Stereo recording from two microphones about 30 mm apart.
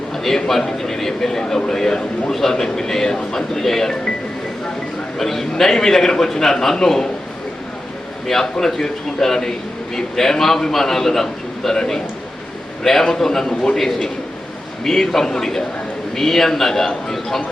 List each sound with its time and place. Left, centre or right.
0.3 s a man's voice: centre
5.1 s a man's voice: centre
8.3 s a man's voice: centre
15.1 s a man's voice: centre